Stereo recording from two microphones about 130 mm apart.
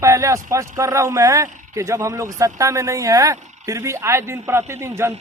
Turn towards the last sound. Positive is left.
turn(degrees=-20)  # may be behind; listen again after turning